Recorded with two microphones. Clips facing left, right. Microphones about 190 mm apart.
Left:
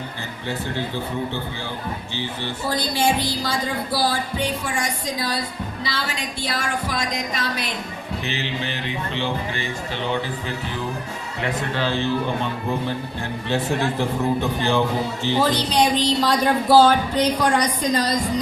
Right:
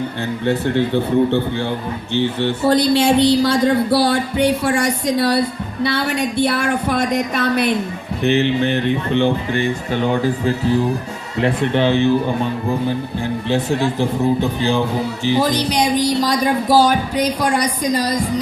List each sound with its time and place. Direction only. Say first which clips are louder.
0.4 s speech: right 9 dB; 60° right (ahead or behind); by 10.5 s 45° right (ahead or behind)
11.4 s speech: right 8 dB; 20° right (ahead or behind)
15.2 s speech: right 4 dB; 15° right (ahead or behind)